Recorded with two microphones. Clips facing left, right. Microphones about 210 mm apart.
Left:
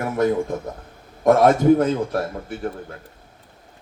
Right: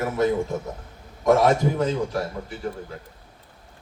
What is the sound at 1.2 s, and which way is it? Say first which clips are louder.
Speech: left 4 dB; 55° left (ahead or behind).